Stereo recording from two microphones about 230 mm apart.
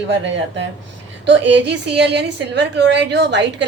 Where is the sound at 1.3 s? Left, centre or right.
Right.